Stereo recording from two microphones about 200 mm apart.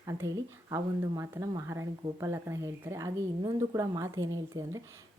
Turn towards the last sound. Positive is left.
turn(degrees=-15)  # may be behind; listen again after turning